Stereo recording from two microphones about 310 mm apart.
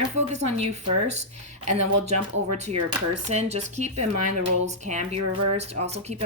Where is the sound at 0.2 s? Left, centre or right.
Right.